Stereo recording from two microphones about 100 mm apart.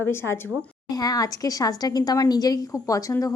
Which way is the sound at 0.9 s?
40° left (ahead or behind).